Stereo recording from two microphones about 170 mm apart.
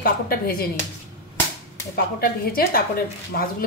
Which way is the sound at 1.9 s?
60° left (ahead or behind).